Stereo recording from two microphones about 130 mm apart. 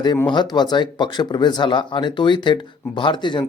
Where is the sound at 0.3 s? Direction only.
35° left (ahead or behind).